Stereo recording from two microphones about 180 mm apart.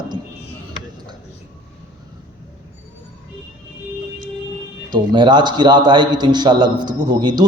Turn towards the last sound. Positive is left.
turn(degrees=-20)  # may be behind; listen again after turning